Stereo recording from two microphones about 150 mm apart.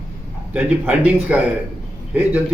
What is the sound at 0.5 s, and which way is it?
A man's voice, 10° right (ahead or behind).